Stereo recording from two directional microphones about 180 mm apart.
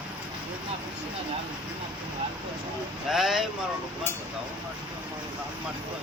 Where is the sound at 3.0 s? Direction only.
Centre (ahead or behind).